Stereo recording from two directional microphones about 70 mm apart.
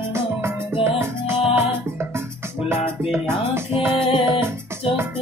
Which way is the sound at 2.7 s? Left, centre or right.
Right.